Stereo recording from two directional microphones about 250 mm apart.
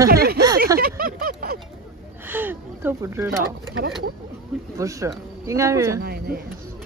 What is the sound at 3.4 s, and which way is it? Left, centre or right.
Speech, right.